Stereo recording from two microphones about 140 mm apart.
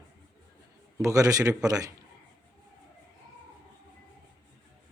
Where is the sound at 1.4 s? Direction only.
10° right (ahead or behind).